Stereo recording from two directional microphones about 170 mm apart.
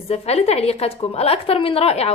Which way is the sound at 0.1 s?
40° left (ahead or behind).